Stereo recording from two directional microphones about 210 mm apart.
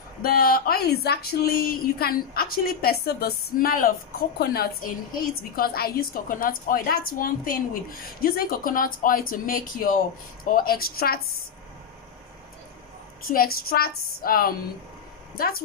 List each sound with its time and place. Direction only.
0.2 s speech: 45° left (ahead or behind)
13.2 s speech: 45° left (ahead or behind)